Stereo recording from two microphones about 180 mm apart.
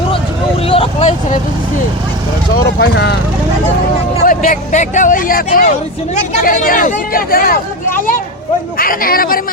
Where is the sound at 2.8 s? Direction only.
75° left (ahead or behind).